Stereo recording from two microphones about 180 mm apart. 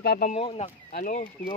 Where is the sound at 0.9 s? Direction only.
50° left (ahead or behind).